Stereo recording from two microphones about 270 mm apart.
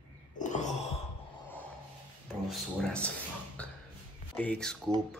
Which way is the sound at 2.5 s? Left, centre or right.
Centre.